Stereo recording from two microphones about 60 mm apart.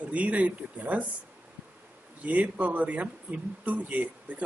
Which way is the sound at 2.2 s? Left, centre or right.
Right.